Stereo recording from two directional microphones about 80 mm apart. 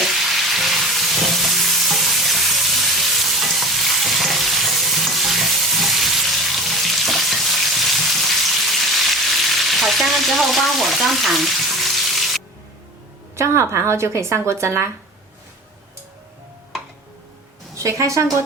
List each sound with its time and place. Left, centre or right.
0.0 s frying: centre
13.3 s speech: right
17.7 s a woman's voice: right